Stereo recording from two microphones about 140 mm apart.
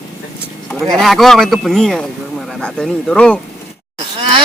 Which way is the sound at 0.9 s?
Centre (ahead or behind).